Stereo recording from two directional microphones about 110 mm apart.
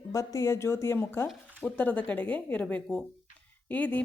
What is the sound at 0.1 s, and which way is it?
A woman's voice, 30° left (ahead or behind).